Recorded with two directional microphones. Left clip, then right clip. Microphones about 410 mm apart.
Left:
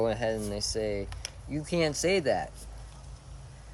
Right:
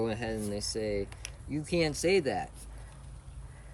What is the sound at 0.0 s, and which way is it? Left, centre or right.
Speech, centre.